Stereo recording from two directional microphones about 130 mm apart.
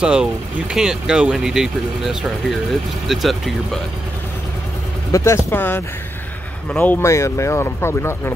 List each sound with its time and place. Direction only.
0.0 s speech: 5° right (ahead or behind)
5.1 s speech: 20° left (ahead or behind)